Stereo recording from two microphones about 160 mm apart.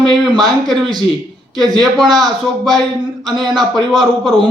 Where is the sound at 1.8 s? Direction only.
Centre (ahead or behind).